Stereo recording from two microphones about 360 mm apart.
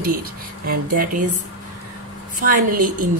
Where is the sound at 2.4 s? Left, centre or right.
Right.